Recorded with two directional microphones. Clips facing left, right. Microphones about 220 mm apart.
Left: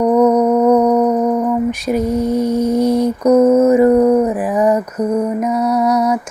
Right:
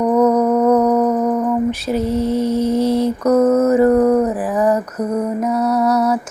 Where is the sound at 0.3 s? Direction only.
15° left (ahead or behind).